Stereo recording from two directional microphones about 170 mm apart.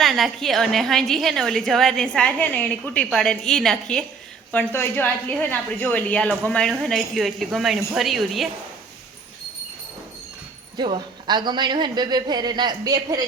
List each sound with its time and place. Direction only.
0.0 s a woman's voice: centre (ahead or behind)
10.8 s a woman's voice: 25° right (ahead or behind)